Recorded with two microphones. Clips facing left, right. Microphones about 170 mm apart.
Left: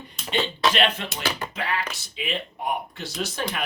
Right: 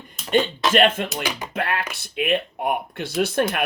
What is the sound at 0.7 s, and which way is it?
Speech, 50° right (ahead or behind).